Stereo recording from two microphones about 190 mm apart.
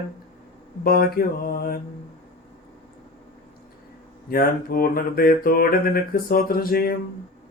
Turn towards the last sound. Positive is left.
turn(degrees=50)  # may be behind; listen again after turning